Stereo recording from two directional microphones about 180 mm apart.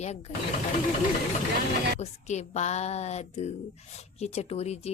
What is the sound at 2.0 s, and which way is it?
A woman's voice, 40° left (ahead or behind).